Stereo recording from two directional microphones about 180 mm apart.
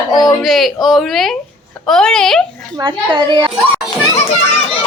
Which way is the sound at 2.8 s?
25° right (ahead or behind).